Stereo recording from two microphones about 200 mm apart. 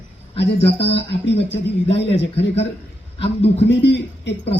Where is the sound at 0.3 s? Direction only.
60° left (ahead or behind).